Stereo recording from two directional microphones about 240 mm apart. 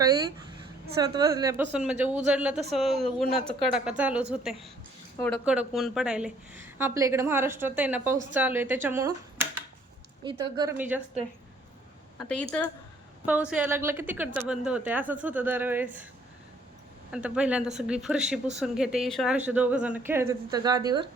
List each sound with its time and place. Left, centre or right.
0.0 s a woman's voice: centre
12.3 s a woman's voice: centre
17.1 s speech: centre